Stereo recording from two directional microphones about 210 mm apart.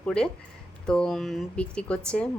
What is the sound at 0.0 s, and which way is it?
A woman's voice, 5° left (ahead or behind).